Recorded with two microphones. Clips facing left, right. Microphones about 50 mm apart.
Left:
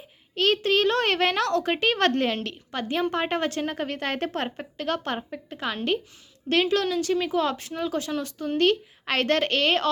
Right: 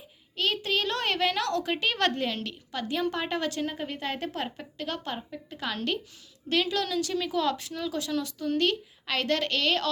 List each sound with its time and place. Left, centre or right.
0.3 s a woman's voice: left
6.5 s speech: left